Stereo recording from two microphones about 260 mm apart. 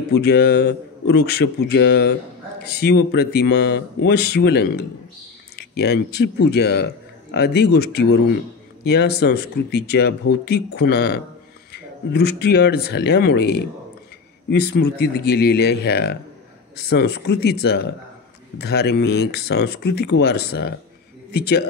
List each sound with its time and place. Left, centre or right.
0.1 s speech: left